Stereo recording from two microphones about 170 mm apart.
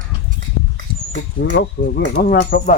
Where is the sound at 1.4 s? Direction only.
85° left.